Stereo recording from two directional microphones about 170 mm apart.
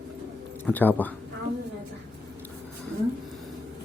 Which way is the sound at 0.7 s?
10° left (ahead or behind).